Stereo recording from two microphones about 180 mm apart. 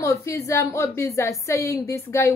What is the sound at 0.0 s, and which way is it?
A woman's voice, 15° left (ahead or behind).